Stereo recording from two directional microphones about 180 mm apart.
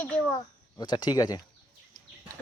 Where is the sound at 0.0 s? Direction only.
10° left (ahead or behind).